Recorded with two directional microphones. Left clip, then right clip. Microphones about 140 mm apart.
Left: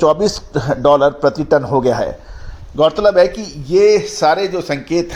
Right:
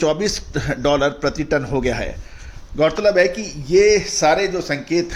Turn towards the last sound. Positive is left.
turn(degrees=40)  # may be behind; listen again after turning